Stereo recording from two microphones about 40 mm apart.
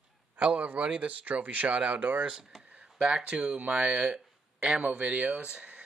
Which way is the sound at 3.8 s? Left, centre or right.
Right.